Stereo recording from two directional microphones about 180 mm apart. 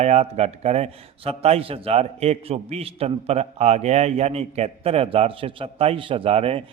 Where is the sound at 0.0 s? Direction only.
35° right (ahead or behind).